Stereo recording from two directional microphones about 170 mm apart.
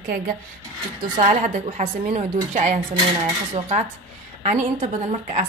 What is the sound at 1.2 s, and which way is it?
A woman's voice, 45° right (ahead or behind).